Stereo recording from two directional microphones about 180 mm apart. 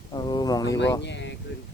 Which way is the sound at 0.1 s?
25° left (ahead or behind).